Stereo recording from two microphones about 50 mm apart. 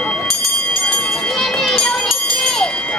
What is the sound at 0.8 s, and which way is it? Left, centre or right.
Children playing, centre.